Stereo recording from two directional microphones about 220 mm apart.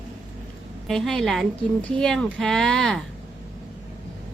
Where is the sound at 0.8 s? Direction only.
Centre (ahead or behind).